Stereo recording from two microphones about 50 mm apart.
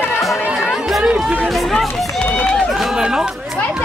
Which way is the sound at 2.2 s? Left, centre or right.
Centre.